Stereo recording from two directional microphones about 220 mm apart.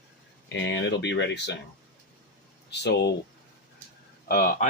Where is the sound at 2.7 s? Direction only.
50° left (ahead or behind).